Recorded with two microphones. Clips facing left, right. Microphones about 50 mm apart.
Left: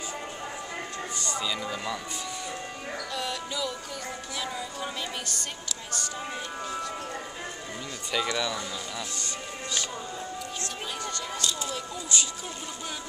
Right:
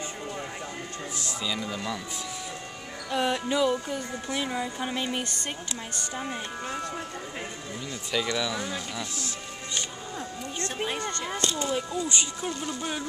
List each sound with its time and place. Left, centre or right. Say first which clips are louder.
1.1 s speech: left 1 dB; centre
3.1 s music: right 10 dB; right
8.1 s speech: even; centre
10.8 s speech: right 5 dB; right
11.7 s music: right 4 dB; right